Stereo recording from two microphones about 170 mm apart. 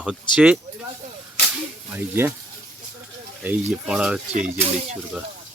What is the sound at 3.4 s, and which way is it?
Speech, 5° right (ahead or behind).